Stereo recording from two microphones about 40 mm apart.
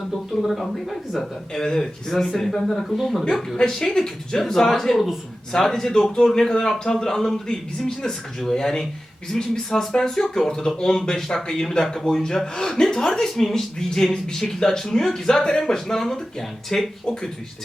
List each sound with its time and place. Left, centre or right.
0.4 s speech: centre
5.5 s speech: centre